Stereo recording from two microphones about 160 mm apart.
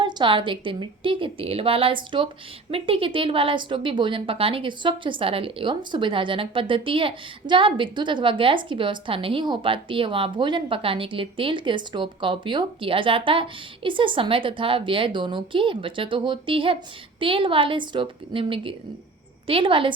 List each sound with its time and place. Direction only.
0.0 s a woman's voice: 30° right (ahead or behind)